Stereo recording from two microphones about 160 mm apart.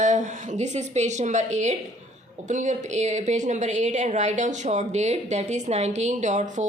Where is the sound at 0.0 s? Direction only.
50° right (ahead or behind).